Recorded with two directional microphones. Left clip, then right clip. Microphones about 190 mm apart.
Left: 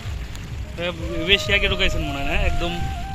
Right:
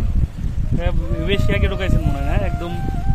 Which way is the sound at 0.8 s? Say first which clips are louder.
Left 2 dB; 60° right (ahead or behind).